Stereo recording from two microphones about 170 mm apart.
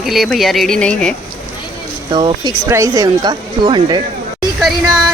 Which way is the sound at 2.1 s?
25° right (ahead or behind).